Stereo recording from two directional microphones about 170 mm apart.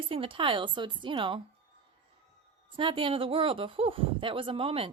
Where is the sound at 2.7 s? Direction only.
30° right (ahead or behind).